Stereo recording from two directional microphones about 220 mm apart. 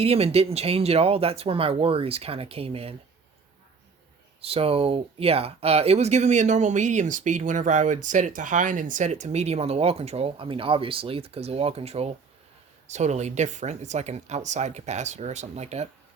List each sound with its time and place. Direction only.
0.0 s speech: 25° right (ahead or behind)
4.4 s speech: 25° right (ahead or behind)